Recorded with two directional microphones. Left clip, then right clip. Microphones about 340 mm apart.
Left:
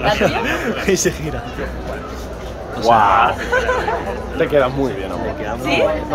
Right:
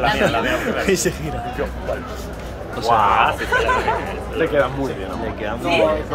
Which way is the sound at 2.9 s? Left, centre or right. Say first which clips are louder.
Left 4 dB; left.